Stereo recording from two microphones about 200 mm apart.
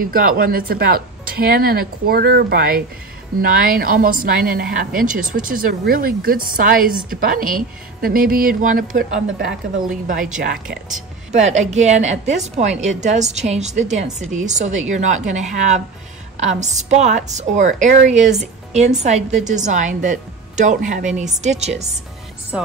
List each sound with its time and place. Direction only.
0.1 s a woman's voice: 45° right (ahead or behind)
10.3 s a woman's voice: 45° right (ahead or behind)
11.3 s a woman's voice: 35° right (ahead or behind)
22.5 s speech: 5° right (ahead or behind)